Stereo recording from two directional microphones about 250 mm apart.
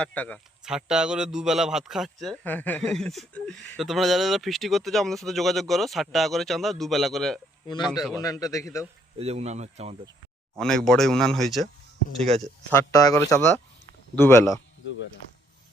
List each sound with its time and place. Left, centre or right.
0.0 s a man's voice: centre
8.1 s speech: centre
9.1 s speech: right
10.6 s a man's voice: centre
12.1 s speech: right
12.4 s speech: centre